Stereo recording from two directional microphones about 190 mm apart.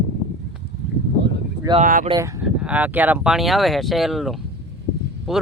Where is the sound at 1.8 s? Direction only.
45° right (ahead or behind).